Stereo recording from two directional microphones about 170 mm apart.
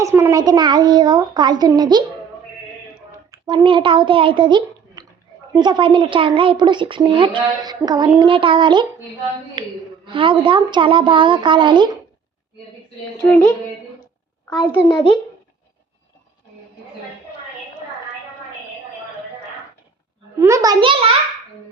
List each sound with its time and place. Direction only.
0.0 s speech: 15° right (ahead or behind)
3.3 s speech: 25° right (ahead or behind)
13.2 s speech: 10° left (ahead or behind)
14.8 s a child's voice: 30° left (ahead or behind)
20.4 s speech: 20° right (ahead or behind)